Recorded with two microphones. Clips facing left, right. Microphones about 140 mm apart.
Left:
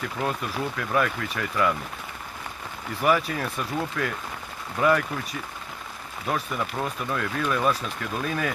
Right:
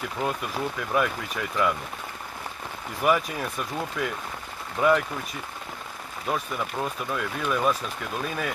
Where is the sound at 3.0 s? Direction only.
Centre (ahead or behind).